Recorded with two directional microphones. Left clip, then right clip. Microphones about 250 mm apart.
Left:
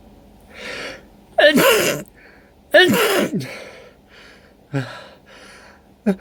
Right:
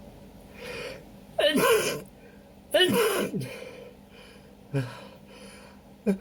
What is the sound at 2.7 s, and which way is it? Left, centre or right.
Sigh, left.